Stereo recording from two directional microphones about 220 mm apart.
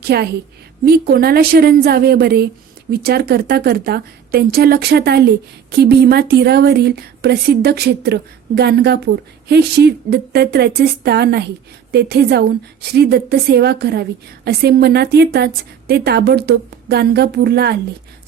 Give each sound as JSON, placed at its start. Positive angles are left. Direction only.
{"t": 0.0, "sound": "speech", "side_deg": -45}